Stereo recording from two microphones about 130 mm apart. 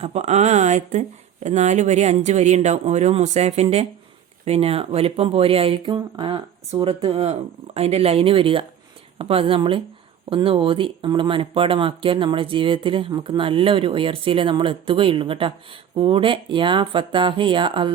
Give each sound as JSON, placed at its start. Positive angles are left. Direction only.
{"t": 0.0, "sound": "speech", "side_deg": -60}